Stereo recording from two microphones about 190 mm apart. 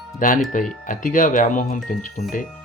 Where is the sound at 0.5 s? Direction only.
45° left (ahead or behind).